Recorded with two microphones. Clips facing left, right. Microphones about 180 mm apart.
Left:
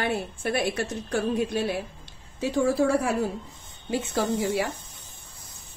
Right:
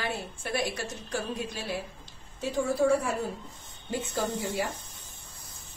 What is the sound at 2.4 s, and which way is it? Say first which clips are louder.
A woman's voice: left 4 dB; 80° left.